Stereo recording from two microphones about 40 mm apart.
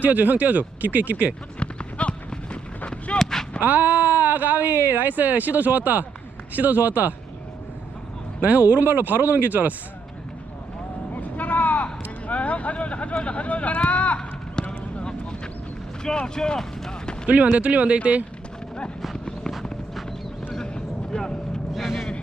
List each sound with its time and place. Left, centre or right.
0.0 s speech: right
1.5 s run: left
3.2 s a sound: centre
3.6 s speech: right
8.4 s speech: right
11.1 s vehicle: left
12.3 s speech: left
16.0 s speech: centre
17.2 s speech: right
20.5 s vehicle: centre
21.7 s vehicle: centre